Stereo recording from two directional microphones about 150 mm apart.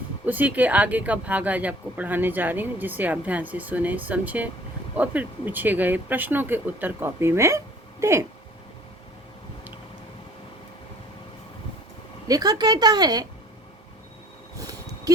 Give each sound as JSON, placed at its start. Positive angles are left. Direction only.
{"t": 0.3, "sound": "a woman's voice", "side_deg": -10}
{"t": 12.3, "sound": "a woman's voice", "side_deg": -25}
{"t": 14.6, "sound": "a sound", "side_deg": -25}